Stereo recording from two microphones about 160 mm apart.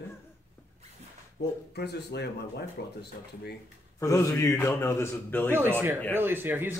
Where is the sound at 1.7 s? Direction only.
90° left.